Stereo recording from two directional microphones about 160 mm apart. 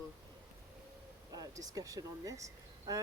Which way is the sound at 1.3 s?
20° right (ahead or behind).